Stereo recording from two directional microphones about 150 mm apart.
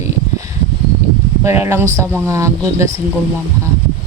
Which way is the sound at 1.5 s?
15° right (ahead or behind).